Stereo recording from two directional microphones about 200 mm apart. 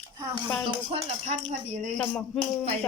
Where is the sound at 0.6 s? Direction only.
25° right (ahead or behind).